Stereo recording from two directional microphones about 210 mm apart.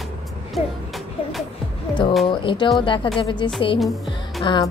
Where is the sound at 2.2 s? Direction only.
25° left (ahead or behind).